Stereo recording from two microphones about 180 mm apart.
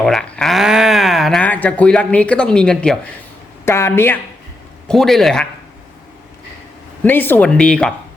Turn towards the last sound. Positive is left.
turn(degrees=5)  # may be behind; listen again after turning